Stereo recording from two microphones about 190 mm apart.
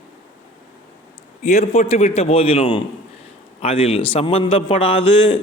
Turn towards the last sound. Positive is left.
turn(degrees=30)  # may be behind; listen again after turning